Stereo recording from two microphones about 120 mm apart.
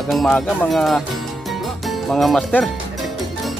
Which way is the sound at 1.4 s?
Centre (ahead or behind).